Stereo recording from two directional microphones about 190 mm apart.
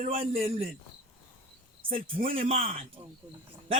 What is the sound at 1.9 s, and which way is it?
Speech, 30° right (ahead or behind).